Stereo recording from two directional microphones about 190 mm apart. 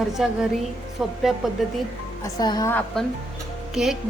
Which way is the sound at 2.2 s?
20° left (ahead or behind).